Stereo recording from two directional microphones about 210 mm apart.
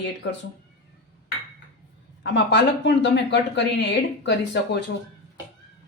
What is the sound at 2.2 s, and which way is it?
Speech, 55° left (ahead or behind).